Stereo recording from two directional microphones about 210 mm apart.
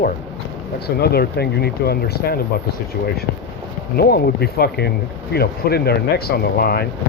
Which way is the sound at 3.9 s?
45° left (ahead or behind).